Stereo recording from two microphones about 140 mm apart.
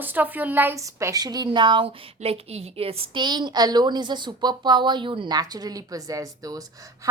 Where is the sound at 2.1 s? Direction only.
45° right (ahead or behind).